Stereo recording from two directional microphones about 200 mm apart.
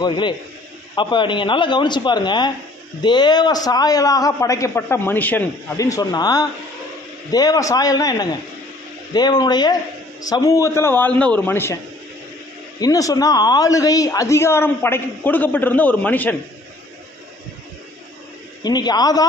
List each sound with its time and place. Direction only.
0.0 s a man's voice: 25° left (ahead or behind)
12.8 s speech: 15° left (ahead or behind)
18.6 s a man's voice: 20° left (ahead or behind)